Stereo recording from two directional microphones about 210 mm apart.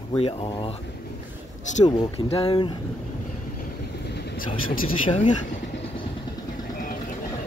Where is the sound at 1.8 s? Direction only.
25° left (ahead or behind).